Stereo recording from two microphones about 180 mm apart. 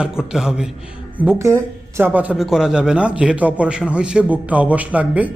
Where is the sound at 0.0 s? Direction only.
5° right (ahead or behind).